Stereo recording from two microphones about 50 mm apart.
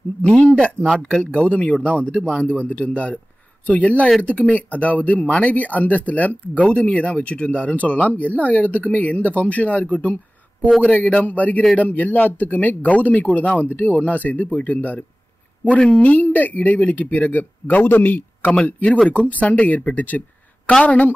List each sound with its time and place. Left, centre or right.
0.8 s speech: centre
1.2 s speech: left
19.9 s a sound: left
20.8 s speech: left